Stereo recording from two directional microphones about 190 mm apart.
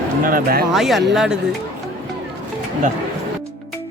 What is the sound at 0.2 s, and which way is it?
Speech, 50° right (ahead or behind).